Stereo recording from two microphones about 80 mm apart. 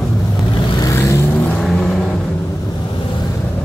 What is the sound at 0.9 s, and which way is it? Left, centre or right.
Vehicle, left.